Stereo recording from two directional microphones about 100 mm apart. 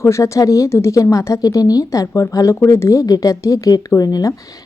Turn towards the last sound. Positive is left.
turn(degrees=35)  # may be behind; listen again after turning